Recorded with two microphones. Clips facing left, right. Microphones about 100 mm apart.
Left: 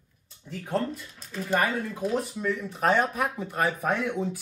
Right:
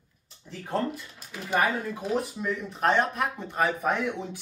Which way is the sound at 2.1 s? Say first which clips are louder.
Right 1 dB; centre (ahead or behind).